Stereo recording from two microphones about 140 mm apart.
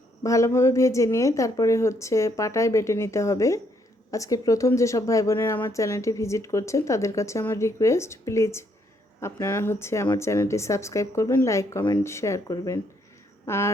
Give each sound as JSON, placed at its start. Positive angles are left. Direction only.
{"t": 0.2, "sound": "a woman's voice", "side_deg": 20}